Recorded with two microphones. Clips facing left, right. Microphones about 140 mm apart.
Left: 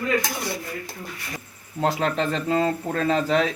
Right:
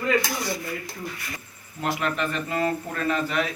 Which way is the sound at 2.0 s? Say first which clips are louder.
Left 3 dB; 90° left.